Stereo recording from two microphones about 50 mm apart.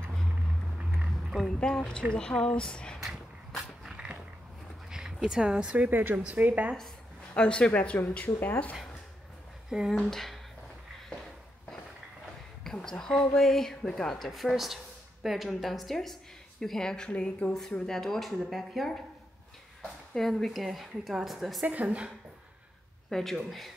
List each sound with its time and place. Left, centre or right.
1.3 s speech: centre
2.1 s speech: centre
3.9 s dog: centre
4.9 s speech: centre
5.9 s speech: right
7.3 s speech: centre; by 8.7 s left
9.7 s speech: centre
10.0 s speech: centre
12.6 s speech: centre
20.2 s speech: centre
21.6 s speech: right
23.0 s speech: centre